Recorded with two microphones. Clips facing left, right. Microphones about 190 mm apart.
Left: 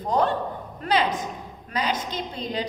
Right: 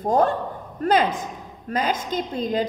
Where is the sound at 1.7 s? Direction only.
50° right (ahead or behind).